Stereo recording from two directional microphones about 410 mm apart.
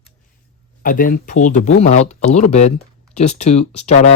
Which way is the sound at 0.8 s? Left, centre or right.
Centre.